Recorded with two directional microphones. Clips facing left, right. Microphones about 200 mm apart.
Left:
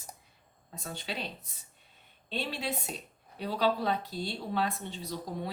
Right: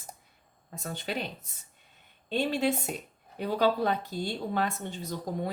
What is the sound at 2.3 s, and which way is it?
Speech, 50° right (ahead or behind).